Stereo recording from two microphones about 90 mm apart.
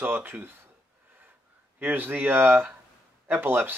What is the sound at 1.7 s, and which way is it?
Speech, 20° right (ahead or behind).